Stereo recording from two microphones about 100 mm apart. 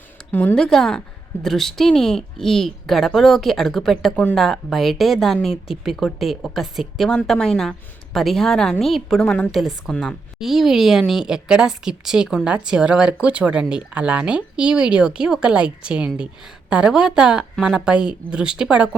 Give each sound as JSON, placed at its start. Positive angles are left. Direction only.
{"t": 0.3, "sound": "speech", "side_deg": 15}
{"t": 0.5, "sound": "speech", "side_deg": 5}